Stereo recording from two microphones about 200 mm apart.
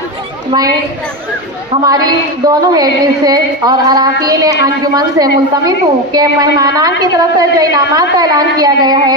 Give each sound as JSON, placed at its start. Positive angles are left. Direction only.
{"t": 0.5, "sound": "a woman's voice", "side_deg": -20}
{"t": 1.9, "sound": "a woman's voice", "side_deg": -20}